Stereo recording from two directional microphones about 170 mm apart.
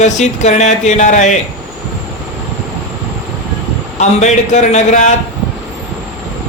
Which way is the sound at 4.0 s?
45° left (ahead or behind).